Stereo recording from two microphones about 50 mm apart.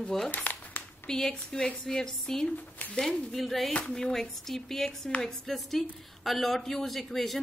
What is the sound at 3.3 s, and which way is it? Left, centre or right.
A woman's voice, centre.